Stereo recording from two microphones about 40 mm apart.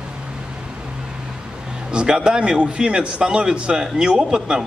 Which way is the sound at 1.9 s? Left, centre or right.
Right.